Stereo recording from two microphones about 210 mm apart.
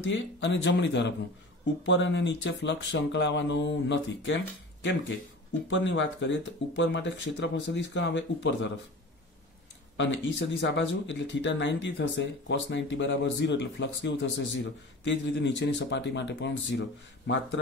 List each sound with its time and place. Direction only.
0.0 s speech: 60° left (ahead or behind)
5.7 s speech: 60° left (ahead or behind)
9.9 s speech: 60° left (ahead or behind)